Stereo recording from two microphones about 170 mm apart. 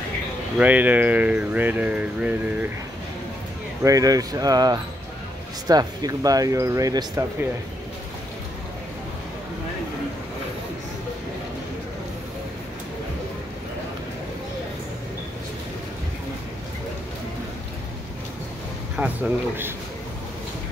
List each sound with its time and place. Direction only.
0.6 s speech: 10° right (ahead or behind)
3.8 s speech: 20° right (ahead or behind)
18.9 s speech: 10° right (ahead or behind)